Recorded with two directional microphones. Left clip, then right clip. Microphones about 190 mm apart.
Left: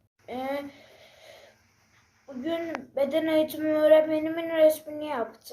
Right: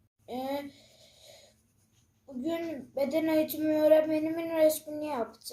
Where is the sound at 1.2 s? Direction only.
30° right (ahead or behind).